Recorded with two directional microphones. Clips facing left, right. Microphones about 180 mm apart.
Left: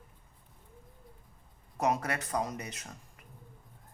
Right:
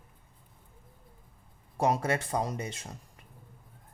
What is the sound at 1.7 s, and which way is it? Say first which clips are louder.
Speech: right 3 dB; 30° right (ahead or behind).